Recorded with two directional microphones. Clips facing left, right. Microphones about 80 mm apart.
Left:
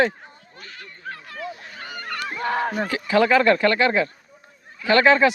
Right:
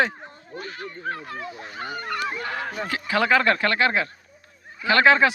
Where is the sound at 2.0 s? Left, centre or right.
Centre.